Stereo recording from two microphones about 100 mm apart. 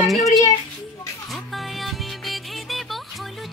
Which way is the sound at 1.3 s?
Centre (ahead or behind).